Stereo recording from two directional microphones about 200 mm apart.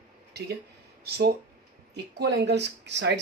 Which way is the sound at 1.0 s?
55° right (ahead or behind).